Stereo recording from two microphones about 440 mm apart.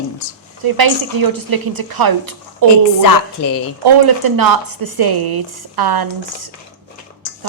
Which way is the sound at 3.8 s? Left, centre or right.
Right.